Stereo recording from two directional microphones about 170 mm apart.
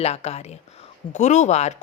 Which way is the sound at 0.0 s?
40° left (ahead or behind).